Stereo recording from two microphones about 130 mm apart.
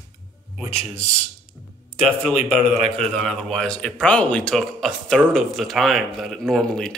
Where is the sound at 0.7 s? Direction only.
55° left (ahead or behind).